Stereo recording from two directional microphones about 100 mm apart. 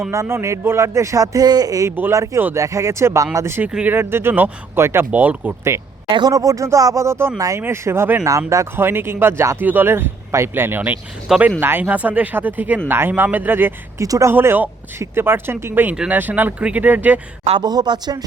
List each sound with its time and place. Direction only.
0.1 s speech: 25° right (ahead or behind)
3.7 s speech: 10° right (ahead or behind)
3.9 s speech: 25° right (ahead or behind)
6.1 s speech: 50° right (ahead or behind)
6.3 s speech: 35° right (ahead or behind)
14.0 s speech: 30° right (ahead or behind)
14.3 s speech: 20° right (ahead or behind)
17.6 s speech: 45° right (ahead or behind)